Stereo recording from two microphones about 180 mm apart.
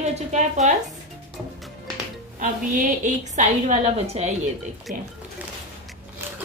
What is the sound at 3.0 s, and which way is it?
A woman's voice, 45° right (ahead or behind).